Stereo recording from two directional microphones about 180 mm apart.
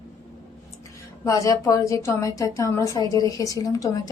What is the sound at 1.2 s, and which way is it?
A woman's voice, 15° left (ahead or behind).